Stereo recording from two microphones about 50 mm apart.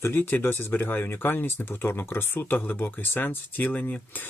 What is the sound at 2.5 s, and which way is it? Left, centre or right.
Speech, left.